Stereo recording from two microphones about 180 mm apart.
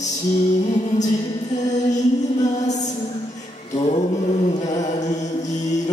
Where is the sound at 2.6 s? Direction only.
40° left (ahead or behind).